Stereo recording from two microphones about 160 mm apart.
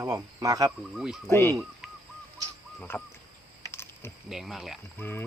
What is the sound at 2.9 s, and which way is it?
Speech, 10° left (ahead or behind).